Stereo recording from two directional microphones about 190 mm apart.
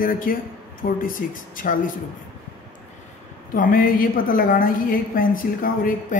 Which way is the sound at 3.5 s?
45° left (ahead or behind).